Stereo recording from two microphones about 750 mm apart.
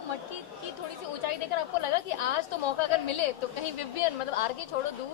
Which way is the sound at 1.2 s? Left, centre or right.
Left.